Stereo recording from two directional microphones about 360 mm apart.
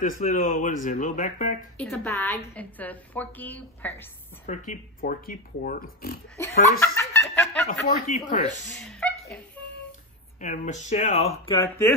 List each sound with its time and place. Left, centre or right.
0.0 s speech: left
1.8 s a woman's voice: centre
4.5 s speech: left
6.8 s a sound: centre
7.8 s speech: left
9.0 s a sound: centre
10.4 s speech: centre